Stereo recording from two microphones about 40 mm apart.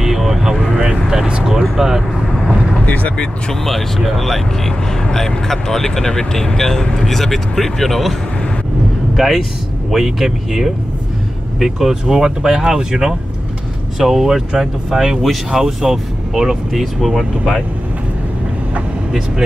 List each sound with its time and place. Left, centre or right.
0.0 s vehicle: centre
1.6 s vehicle: centre
2.8 s speech: left
3.6 s speech: centre
16.8 s speech: centre